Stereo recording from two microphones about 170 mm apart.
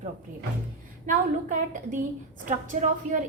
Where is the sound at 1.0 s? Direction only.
50° right (ahead or behind).